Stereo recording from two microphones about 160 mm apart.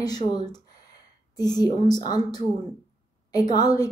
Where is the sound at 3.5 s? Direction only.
25° left (ahead or behind).